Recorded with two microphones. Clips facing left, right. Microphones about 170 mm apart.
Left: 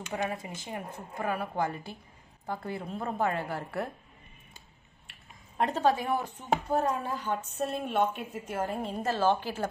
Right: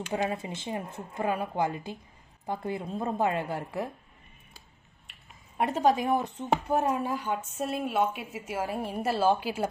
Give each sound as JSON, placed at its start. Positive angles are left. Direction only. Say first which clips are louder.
{"t": 0.1, "sound": "a woman's voice", "louder": "right 3 dB", "side_deg": -25}
{"t": 5.6, "sound": "speech", "louder": "right 2 dB", "side_deg": -10}